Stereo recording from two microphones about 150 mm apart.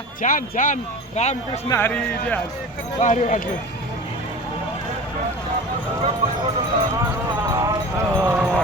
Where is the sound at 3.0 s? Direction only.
55° left (ahead or behind).